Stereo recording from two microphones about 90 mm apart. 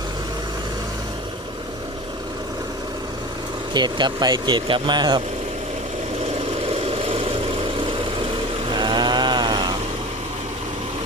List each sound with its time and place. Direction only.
3.8 s speech: 55° right (ahead or behind)
6.8 s vehicle: 90° right
8.7 s chainsaw: 55° right (ahead or behind)